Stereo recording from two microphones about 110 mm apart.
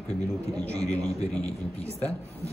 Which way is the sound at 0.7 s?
10° left (ahead or behind).